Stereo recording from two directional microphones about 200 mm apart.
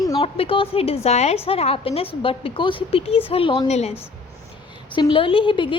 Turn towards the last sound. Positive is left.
turn(degrees=25)  # may be behind; listen again after turning